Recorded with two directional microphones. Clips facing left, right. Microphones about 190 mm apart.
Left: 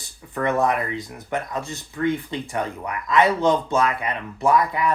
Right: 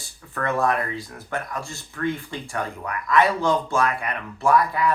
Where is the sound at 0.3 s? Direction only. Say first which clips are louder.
Left 2 dB; 20° left (ahead or behind).